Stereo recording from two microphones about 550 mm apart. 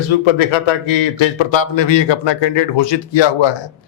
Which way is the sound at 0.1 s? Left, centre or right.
Left.